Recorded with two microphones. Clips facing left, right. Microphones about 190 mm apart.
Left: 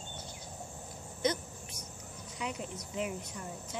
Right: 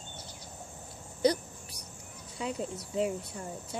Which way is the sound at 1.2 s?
35° right (ahead or behind).